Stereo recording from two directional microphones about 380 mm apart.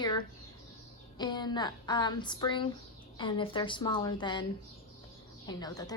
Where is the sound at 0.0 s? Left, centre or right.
Centre.